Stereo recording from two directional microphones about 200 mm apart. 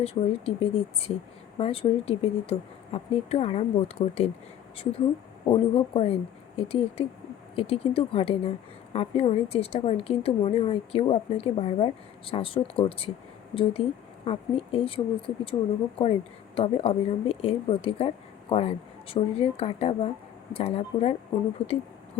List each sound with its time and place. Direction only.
0.0 s a woman's voice: 30° left (ahead or behind)
21.6 s a woman's voice: 5° left (ahead or behind)